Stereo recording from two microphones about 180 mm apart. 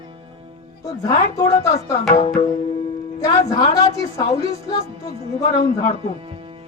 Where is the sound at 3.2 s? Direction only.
20° left (ahead or behind).